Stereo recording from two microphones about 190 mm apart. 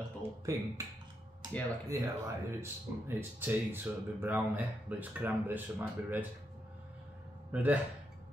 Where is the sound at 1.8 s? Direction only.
20° right (ahead or behind).